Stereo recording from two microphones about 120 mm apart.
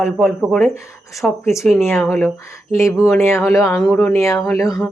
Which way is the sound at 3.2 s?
20° left (ahead or behind).